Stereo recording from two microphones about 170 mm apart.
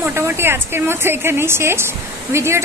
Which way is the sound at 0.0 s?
15° right (ahead or behind).